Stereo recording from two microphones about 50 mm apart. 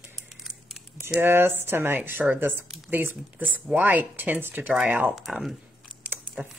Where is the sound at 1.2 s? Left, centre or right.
Right.